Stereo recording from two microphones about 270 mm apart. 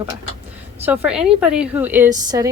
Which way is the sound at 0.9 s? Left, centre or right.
Centre.